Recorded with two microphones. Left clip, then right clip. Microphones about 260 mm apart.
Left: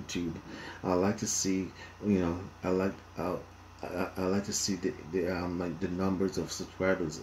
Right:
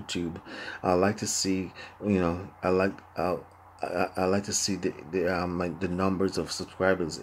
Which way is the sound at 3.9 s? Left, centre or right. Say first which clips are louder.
Right 6 dB; centre.